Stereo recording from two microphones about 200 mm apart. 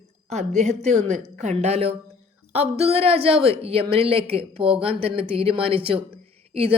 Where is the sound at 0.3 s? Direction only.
35° right (ahead or behind).